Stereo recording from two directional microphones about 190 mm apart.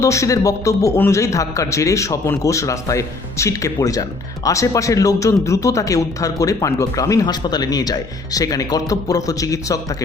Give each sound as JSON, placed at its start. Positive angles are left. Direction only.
{"t": 0.0, "sound": "a man's voice", "side_deg": 15}